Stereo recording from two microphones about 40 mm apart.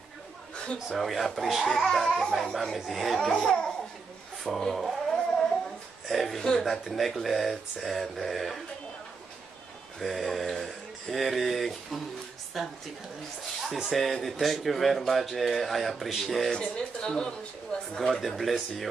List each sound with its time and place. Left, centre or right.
0.8 s speech: centre
1.7 s speech: centre
2.5 s speech: centre
4.7 s a sound: centre
6.0 s a woman's voice: centre
9.9 s speech: centre
13.8 s speech: centre
16.5 s speech: left
18.2 s speech: centre